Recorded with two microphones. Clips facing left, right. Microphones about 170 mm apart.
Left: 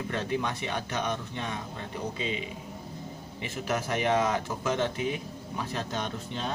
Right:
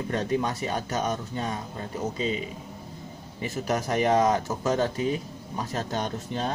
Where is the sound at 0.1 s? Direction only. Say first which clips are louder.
Right 5 dB; 40° right (ahead or behind).